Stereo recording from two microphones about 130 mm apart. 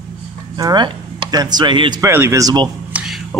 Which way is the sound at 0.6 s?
35° right (ahead or behind).